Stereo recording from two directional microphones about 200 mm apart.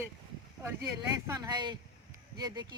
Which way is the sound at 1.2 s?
20° right (ahead or behind).